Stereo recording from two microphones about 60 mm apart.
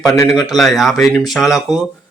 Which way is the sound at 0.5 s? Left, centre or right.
Centre.